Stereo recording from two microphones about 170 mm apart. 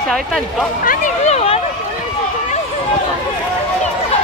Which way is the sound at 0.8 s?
45° left (ahead or behind).